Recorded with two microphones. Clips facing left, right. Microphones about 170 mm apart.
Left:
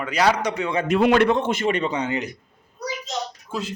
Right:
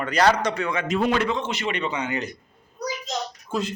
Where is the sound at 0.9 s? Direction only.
65° left (ahead or behind); by 2.1 s 35° left (ahead or behind).